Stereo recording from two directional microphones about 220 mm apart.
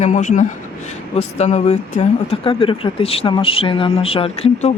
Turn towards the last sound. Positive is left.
turn(degrees=25)  # may be behind; listen again after turning